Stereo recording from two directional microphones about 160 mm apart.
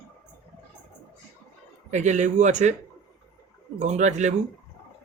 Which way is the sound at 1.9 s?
45° right (ahead or behind).